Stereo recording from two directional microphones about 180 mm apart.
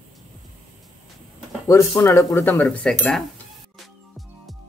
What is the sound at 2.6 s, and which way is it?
Cutlery, 5° left (ahead or behind).